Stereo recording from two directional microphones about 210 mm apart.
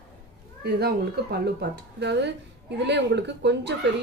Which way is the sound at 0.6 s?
50° right (ahead or behind).